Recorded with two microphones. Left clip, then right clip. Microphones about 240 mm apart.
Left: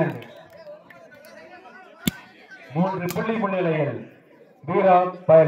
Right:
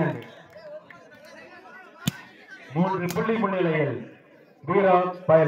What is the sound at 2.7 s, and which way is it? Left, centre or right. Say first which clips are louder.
Speech: left 1 dB; left.